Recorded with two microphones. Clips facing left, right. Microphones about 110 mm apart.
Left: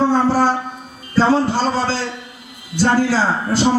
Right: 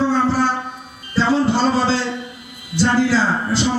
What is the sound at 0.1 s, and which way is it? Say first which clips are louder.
Shofar: left 2 dB; 40° left (ahead or behind).